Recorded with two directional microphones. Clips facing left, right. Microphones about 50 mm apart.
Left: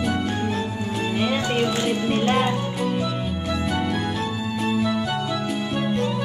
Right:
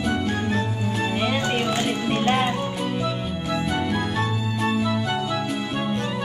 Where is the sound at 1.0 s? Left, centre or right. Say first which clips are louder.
Left 1 dB; centre.